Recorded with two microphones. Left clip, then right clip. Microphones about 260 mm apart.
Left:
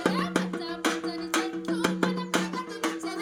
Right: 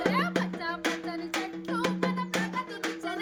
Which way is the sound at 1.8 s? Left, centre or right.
Left.